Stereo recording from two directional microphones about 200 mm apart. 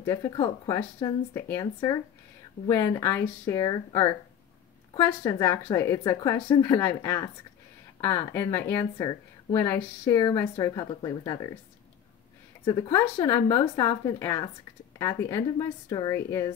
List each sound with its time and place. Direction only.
0.0 s speech: 15° left (ahead or behind)
12.6 s speech: 20° left (ahead or behind)